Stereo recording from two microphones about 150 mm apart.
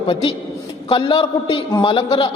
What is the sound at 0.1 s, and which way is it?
A man's voice, 35° left (ahead or behind).